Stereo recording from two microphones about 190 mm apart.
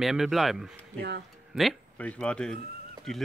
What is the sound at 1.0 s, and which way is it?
Speech, 60° right (ahead or behind).